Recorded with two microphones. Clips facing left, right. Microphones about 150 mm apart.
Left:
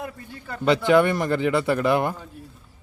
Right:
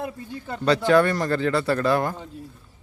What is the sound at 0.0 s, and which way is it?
Speech, 20° right (ahead or behind).